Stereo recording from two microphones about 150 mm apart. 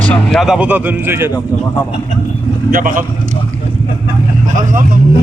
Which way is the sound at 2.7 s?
65° right (ahead or behind).